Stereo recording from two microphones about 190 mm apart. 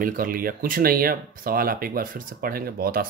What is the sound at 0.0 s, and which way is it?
Speech, 45° right (ahead or behind).